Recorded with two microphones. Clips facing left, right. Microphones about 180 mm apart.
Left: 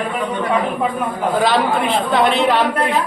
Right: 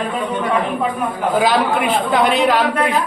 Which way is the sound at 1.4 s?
Centre (ahead or behind).